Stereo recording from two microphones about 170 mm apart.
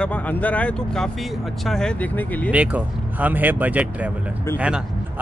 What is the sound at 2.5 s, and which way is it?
A man's voice, 10° right (ahead or behind).